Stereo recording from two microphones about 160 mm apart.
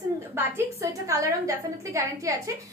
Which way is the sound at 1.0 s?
20° right (ahead or behind).